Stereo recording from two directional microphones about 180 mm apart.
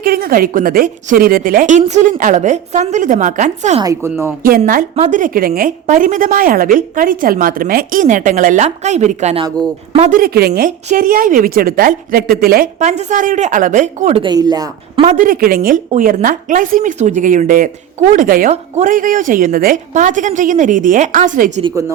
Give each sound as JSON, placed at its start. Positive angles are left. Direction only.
{"t": 0.0, "sound": "a woman's voice", "side_deg": -55}
{"t": 4.1, "sound": "speech", "side_deg": -10}
{"t": 4.4, "sound": "a woman's voice", "side_deg": -50}
{"t": 10.1, "sound": "a woman's voice", "side_deg": -55}
{"t": 10.7, "sound": "a woman's voice", "side_deg": -45}
{"t": 12.8, "sound": "a woman's voice", "side_deg": -40}
{"t": 14.2, "sound": "a woman's voice", "side_deg": -25}
{"t": 15.0, "sound": "a woman's voice", "side_deg": -45}
{"t": 21.6, "sound": "speech", "side_deg": -15}